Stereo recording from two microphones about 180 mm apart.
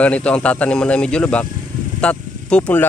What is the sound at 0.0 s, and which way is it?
Speech, 5° left (ahead or behind).